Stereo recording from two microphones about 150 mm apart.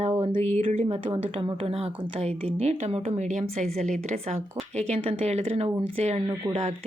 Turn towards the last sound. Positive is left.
turn(degrees=-45)  # may be behind; listen again after turning